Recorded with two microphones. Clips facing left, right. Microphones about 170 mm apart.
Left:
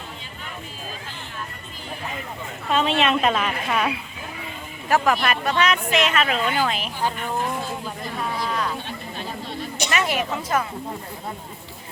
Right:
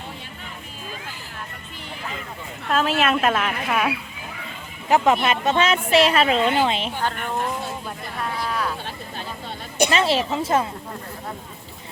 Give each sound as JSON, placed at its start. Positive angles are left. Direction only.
{"t": 2.6, "sound": "a woman's voice", "side_deg": 0}
{"t": 4.9, "sound": "a woman's voice", "side_deg": -20}
{"t": 7.9, "sound": "speech", "side_deg": 0}
{"t": 9.9, "sound": "a woman's voice", "side_deg": -30}